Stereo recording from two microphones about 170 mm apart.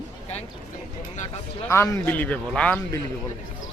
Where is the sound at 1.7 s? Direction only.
15° left (ahead or behind).